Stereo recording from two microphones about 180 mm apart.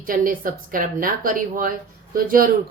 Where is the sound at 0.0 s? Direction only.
50° right (ahead or behind).